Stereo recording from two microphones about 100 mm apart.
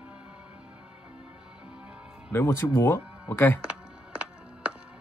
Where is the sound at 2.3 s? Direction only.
25° left (ahead or behind).